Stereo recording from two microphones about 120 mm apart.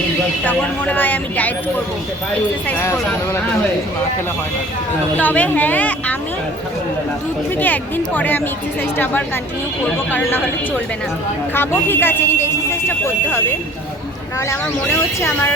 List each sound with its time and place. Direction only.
0.4 s speech: 15° left (ahead or behind)
2.6 s speech: 20° left (ahead or behind)
5.2 s speech: 15° left (ahead or behind)
7.6 s speech: 15° left (ahead or behind)
11.9 s speech: 20° left (ahead or behind)
15.2 s speech: 20° left (ahead or behind)